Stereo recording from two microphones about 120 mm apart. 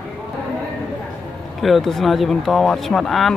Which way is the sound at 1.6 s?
Centre (ahead or behind).